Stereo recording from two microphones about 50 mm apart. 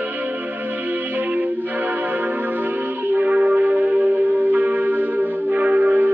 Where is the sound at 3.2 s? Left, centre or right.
Right.